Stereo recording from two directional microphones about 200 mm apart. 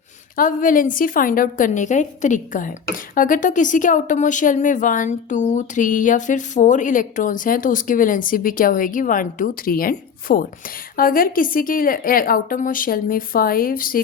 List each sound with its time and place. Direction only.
0.3 s a woman's voice: 45° left (ahead or behind)